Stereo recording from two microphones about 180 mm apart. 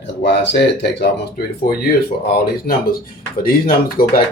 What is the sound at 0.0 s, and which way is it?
Speech, 75° left (ahead or behind).